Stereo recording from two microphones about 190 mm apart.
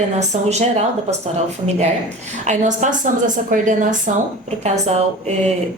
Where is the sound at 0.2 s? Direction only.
35° right (ahead or behind).